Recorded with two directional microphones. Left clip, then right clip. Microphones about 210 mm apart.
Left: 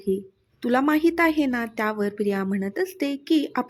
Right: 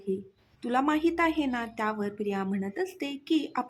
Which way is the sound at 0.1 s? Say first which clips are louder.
Left 7 dB; 15° left (ahead or behind).